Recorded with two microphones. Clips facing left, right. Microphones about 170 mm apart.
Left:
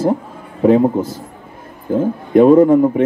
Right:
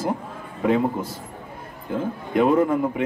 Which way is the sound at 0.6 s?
35° left (ahead or behind).